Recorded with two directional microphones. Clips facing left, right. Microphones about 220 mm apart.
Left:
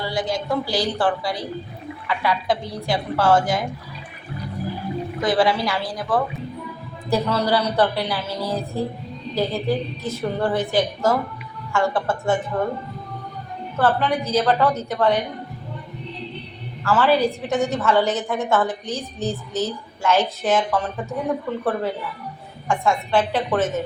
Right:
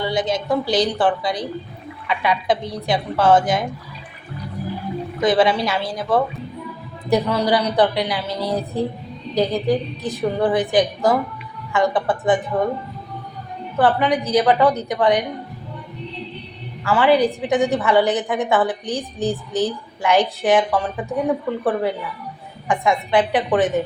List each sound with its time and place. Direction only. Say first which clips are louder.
0.0 s a woman's voice: right 3 dB; 20° right (ahead or behind)
5.2 s a woman's voice: right 3 dB; 20° right (ahead or behind)
13.7 s a woman's voice: right 3 dB; 15° right (ahead or behind)
16.8 s a woman's voice: right 2 dB; 15° right (ahead or behind)